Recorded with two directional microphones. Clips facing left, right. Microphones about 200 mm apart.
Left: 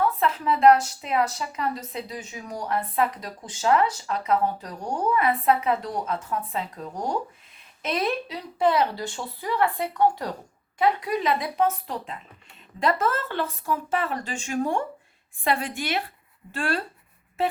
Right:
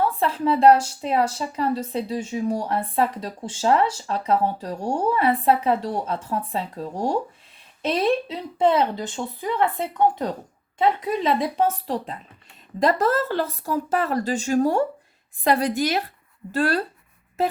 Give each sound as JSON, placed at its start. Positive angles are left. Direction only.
{"t": 0.0, "sound": "a woman's voice", "side_deg": -30}